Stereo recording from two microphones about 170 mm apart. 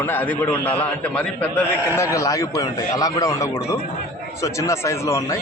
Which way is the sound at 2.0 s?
20° left (ahead or behind).